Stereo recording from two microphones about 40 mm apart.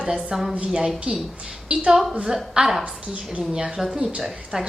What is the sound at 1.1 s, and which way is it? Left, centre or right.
Speech, right.